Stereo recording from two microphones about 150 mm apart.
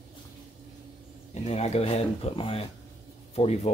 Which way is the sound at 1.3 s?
50° left (ahead or behind).